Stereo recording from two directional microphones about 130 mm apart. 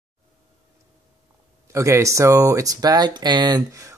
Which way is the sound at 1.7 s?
20° right (ahead or behind).